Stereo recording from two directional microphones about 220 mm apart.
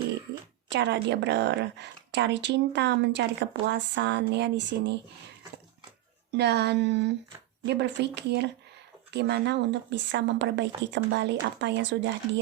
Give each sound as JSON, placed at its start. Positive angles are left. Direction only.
{"t": 0.7, "sound": "a woman's voice", "side_deg": -50}
{"t": 6.3, "sound": "a woman's voice", "side_deg": -50}